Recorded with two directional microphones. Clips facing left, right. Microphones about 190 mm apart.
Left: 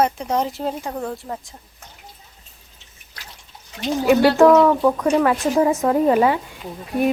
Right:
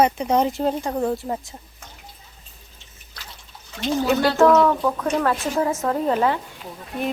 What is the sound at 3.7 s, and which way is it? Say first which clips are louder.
Speech: left 4 dB; 15° left (ahead or behind).